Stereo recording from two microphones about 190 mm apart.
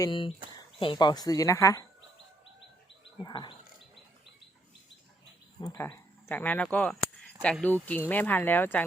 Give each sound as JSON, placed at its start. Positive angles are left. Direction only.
{"t": 0.0, "sound": "speech", "side_deg": 25}
{"t": 3.2, "sound": "speech", "side_deg": 20}
{"t": 5.5, "sound": "speech", "side_deg": 15}